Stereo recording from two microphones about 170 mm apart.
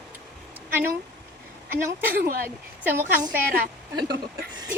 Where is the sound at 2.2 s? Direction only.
60° right (ahead or behind).